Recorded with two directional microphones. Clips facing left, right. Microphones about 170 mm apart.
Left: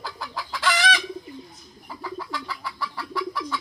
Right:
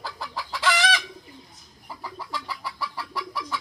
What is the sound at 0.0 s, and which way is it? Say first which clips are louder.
Chicken: even; centre (ahead or behind).